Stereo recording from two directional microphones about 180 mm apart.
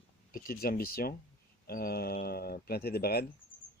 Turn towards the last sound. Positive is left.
turn(degrees=60)  # may be behind; listen again after turning